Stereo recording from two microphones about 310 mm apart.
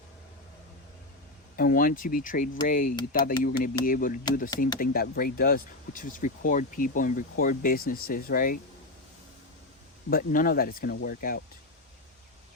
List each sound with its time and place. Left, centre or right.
1.5 s speech: left
10.1 s speech: left